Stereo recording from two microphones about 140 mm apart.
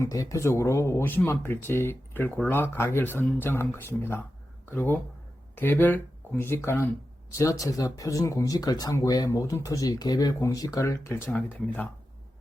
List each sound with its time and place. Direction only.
0.0 s speech: 25° left (ahead or behind)